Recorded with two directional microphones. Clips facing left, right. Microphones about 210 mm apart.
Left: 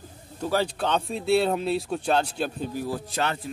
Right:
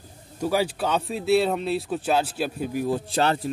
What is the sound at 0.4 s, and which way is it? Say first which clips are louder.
Speech: right 2 dB; 10° right (ahead or behind).